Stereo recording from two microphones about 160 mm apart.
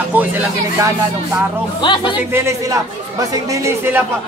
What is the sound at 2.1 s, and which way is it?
A man's voice, 15° right (ahead or behind).